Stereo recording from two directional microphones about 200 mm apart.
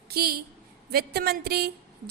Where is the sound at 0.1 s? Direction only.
50° right (ahead or behind).